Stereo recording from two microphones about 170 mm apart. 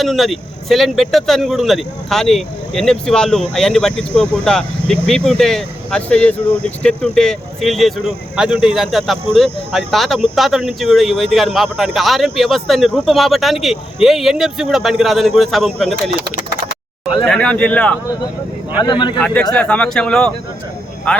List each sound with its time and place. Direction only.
0.0 s speech: centre (ahead or behind)
17.2 s speech: 5° left (ahead or behind)
18.8 s speech: 25° left (ahead or behind)
19.2 s speech: 5° left (ahead or behind)